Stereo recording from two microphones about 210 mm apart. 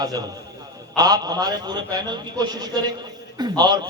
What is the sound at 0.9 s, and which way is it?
A man's voice, 20° right (ahead or behind).